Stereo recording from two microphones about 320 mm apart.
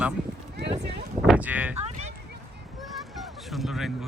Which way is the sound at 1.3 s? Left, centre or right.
Centre.